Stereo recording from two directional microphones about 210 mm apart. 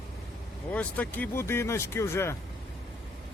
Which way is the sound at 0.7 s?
5° left (ahead or behind).